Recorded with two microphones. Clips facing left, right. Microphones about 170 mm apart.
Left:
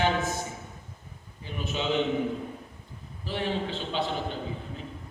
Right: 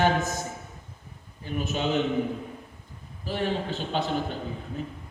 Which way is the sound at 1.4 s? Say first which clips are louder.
Right 3 dB; 45° right (ahead or behind).